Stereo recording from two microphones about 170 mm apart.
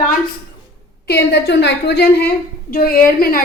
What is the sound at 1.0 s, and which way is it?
A woman's voice, 80° left.